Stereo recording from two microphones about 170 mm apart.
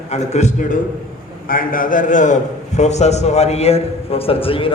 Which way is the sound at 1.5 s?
55° left (ahead or behind).